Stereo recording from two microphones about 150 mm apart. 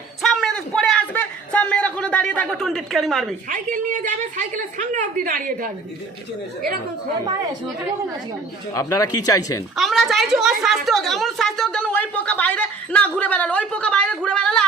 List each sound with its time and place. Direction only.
0.2 s a sound: centre (ahead or behind)
3.5 s a woman's voice: 60° right (ahead or behind)
8.7 s speech: 20° left (ahead or behind)
9.7 s a child's voice: centre (ahead or behind)